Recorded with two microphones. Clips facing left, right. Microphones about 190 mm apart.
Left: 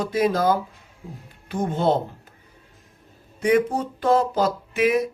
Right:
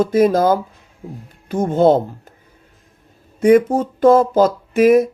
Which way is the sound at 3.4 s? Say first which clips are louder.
Right 8 dB; 45° right (ahead or behind).